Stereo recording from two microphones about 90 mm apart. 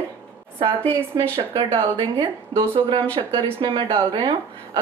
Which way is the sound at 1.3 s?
70° right (ahead or behind).